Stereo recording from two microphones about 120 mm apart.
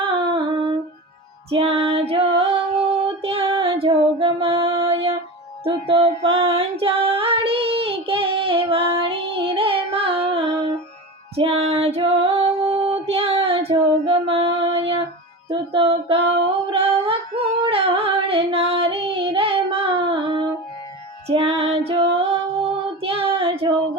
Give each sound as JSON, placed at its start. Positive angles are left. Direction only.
{"t": 0.2, "sound": "humming", "side_deg": -40}
{"t": 1.5, "sound": "music", "side_deg": -55}
{"t": 3.2, "sound": "female singing", "side_deg": -50}
{"t": 5.6, "sound": "music", "side_deg": -50}
{"t": 11.3, "sound": "female singing", "side_deg": -55}
{"t": 15.4, "sound": "a sound", "side_deg": -50}
{"t": 21.2, "sound": "music", "side_deg": -55}
{"t": 23.0, "sound": "child singing", "side_deg": -50}